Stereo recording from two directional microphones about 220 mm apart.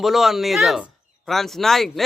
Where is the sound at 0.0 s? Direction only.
Centre (ahead or behind).